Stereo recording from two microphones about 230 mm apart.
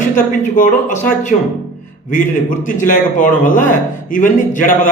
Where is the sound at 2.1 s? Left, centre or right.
Left.